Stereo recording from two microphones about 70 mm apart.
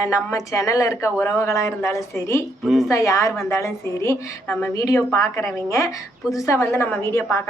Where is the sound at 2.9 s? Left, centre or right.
Left.